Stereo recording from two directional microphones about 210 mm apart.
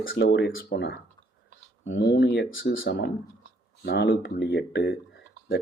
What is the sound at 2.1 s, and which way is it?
Speech, 55° left (ahead or behind).